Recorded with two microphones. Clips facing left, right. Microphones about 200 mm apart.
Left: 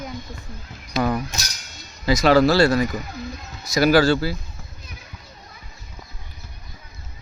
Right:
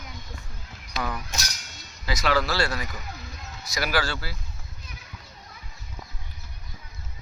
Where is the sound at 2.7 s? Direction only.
45° left (ahead or behind).